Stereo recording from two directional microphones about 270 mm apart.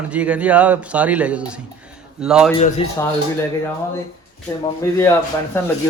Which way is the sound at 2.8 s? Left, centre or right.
Centre.